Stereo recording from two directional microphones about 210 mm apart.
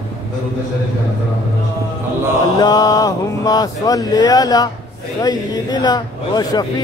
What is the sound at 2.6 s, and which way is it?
Speech, 20° left (ahead or behind).